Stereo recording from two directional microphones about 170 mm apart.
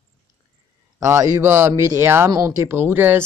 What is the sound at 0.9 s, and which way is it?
A man's voice, 15° right (ahead or behind).